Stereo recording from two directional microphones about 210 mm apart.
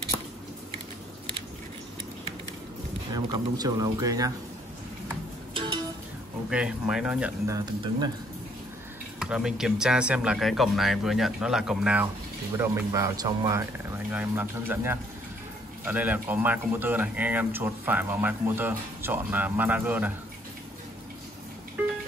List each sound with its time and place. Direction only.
3.2 s a man's voice: 20° right (ahead or behind)
5.5 s music: 25° right (ahead or behind)
6.5 s speech: 5° right (ahead or behind)
9.2 s a man's voice: 5° right (ahead or behind)